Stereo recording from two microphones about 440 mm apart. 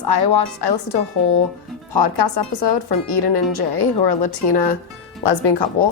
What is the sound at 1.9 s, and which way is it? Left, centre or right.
Speech, left.